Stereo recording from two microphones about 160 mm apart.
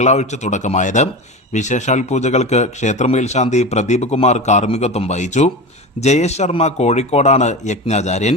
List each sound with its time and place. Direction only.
0.0 s speech: 45° left (ahead or behind)